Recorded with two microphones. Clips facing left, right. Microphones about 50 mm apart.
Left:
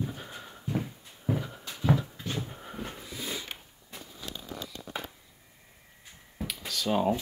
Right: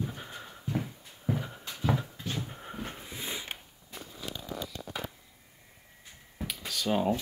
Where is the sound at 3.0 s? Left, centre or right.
Right.